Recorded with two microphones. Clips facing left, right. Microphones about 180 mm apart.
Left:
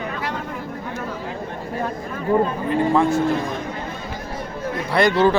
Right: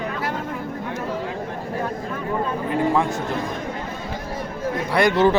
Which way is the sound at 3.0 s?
20° right (ahead or behind).